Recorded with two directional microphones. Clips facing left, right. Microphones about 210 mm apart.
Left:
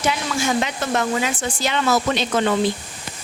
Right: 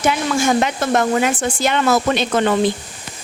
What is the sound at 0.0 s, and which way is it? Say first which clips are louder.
Speech: right 5 dB; 50° right (ahead or behind).